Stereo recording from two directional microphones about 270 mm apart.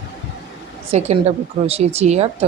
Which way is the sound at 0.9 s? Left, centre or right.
Right.